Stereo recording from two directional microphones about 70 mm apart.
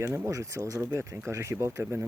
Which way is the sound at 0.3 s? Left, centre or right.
Right.